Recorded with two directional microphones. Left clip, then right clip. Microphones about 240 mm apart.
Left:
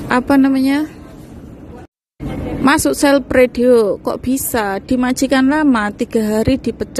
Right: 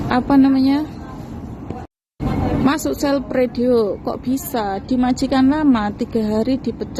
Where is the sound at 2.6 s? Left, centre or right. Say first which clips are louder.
Left 9 dB; left.